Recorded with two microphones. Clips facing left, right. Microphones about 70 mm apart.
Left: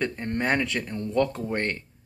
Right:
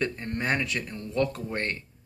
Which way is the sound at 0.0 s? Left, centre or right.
Left.